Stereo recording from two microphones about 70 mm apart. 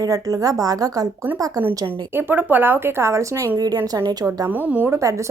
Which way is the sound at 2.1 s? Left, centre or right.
Right.